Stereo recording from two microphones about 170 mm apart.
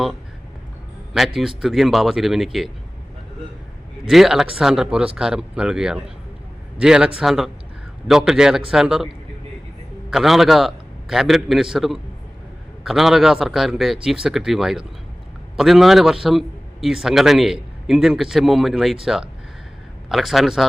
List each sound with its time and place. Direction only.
1.1 s a man's voice: centre (ahead or behind)
4.0 s a man's voice: centre (ahead or behind)
10.1 s a man's voice: centre (ahead or behind)
20.1 s a man's voice: centre (ahead or behind)